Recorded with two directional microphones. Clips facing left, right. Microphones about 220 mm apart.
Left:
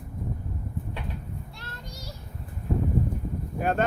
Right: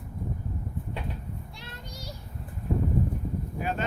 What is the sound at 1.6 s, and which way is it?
Child singing, 15° right (ahead or behind).